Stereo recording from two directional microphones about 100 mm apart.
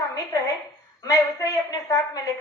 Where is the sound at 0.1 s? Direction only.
35° left (ahead or behind).